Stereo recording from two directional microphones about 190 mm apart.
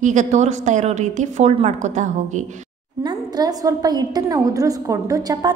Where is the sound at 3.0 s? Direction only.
20° right (ahead or behind).